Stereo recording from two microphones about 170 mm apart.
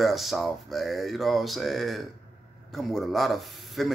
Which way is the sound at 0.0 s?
Centre (ahead or behind).